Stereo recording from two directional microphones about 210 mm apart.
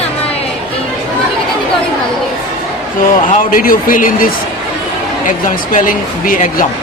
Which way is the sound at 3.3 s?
40° left (ahead or behind).